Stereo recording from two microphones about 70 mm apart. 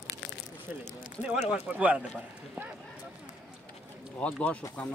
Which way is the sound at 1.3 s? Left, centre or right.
Centre.